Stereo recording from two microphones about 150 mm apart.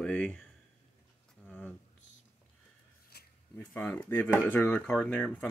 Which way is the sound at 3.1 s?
90° left.